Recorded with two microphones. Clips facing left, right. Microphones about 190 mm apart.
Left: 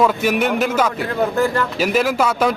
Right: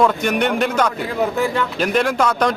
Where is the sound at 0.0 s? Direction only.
5° left (ahead or behind).